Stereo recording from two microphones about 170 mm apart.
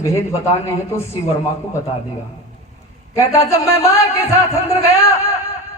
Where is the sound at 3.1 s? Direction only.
15° left (ahead or behind).